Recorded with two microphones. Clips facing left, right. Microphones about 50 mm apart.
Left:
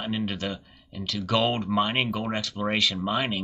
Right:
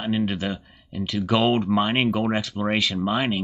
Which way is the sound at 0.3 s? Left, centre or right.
Centre.